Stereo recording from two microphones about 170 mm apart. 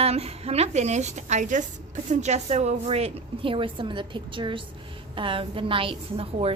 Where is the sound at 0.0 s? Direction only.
35° right (ahead or behind).